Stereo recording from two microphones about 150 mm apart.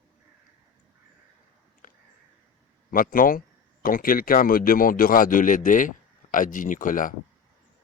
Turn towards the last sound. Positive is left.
turn(degrees=60)  # may be behind; listen again after turning